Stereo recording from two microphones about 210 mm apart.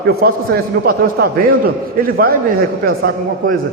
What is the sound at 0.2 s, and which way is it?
A man's voice, 45° right (ahead or behind).